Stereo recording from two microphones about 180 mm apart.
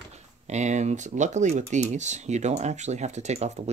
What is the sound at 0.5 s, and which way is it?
Speech, 40° right (ahead or behind).